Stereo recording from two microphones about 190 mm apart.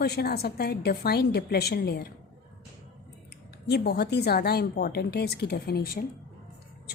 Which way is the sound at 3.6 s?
60° left (ahead or behind).